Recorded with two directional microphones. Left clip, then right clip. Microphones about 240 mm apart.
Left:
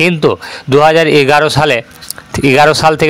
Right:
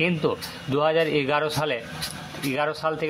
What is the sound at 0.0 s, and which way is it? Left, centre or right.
A man's voice, left.